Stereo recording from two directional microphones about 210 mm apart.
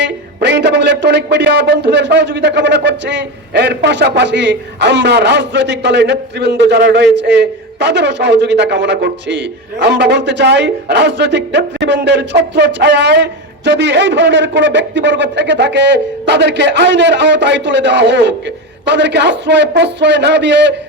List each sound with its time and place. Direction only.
0.0 s a man's voice: 55° right (ahead or behind)